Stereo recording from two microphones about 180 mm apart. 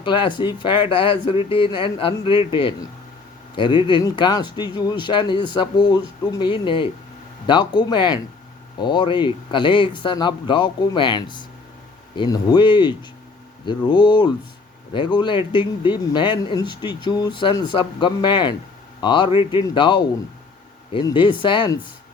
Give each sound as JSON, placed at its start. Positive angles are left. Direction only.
{"t": 0.0, "sound": "speech", "side_deg": 25}